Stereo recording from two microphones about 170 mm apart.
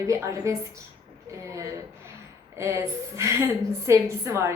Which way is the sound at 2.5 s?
15° right (ahead or behind).